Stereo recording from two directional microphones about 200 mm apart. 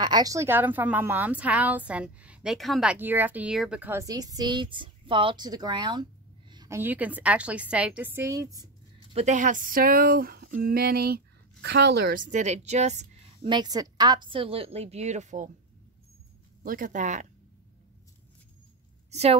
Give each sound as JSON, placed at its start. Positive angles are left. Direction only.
{"t": 0.0, "sound": "a woman's voice", "side_deg": -20}
{"t": 9.1, "sound": "speech", "side_deg": -35}
{"t": 12.3, "sound": "a woman's voice", "side_deg": -35}
{"t": 13.5, "sound": "a woman's voice", "side_deg": -20}
{"t": 16.6, "sound": "speech", "side_deg": -45}
{"t": 19.0, "sound": "a woman's voice", "side_deg": -35}